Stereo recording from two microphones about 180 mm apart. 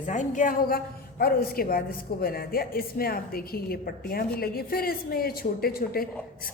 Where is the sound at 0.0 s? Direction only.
45° left (ahead or behind).